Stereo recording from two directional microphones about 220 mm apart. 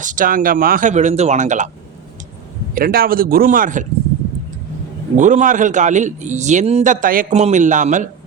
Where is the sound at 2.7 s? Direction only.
45° right (ahead or behind).